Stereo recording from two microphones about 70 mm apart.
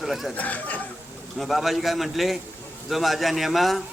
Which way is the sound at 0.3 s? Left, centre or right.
Left.